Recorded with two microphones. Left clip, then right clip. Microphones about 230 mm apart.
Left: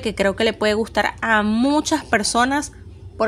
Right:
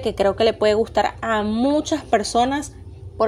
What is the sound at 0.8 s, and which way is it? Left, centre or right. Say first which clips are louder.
Speech: right 1 dB; left.